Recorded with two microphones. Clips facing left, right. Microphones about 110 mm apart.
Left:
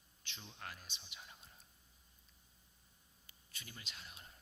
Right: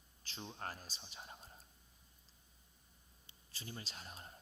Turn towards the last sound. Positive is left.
turn(degrees=-40)  # may be behind; listen again after turning